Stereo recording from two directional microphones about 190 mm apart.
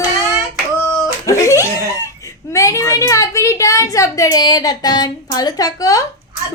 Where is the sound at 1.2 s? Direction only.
15° left (ahead or behind).